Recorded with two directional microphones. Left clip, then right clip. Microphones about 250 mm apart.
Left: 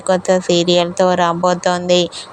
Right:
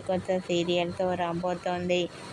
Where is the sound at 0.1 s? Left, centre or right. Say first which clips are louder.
Left 14 dB; left.